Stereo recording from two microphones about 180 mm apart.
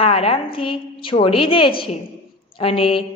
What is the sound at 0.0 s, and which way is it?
A woman's voice, 35° left (ahead or behind).